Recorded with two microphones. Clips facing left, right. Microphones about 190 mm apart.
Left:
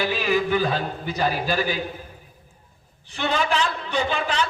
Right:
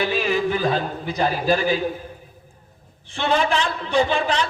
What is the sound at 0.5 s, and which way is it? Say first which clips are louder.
A man's voice: right 1 dB; 35° right (ahead or behind).